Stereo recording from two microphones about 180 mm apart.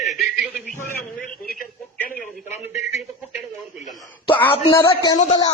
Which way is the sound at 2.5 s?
40° left (ahead or behind).